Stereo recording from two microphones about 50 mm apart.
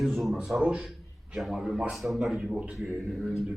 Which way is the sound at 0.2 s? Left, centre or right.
Centre.